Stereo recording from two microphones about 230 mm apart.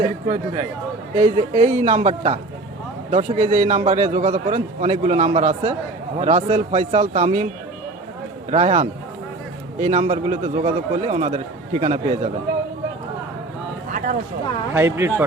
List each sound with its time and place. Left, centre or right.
1.1 s a man's voice: right
8.4 s a man's voice: right
13.9 s a sound: right
14.7 s speech: centre